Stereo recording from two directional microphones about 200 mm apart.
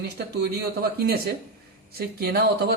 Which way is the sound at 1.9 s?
50° right (ahead or behind).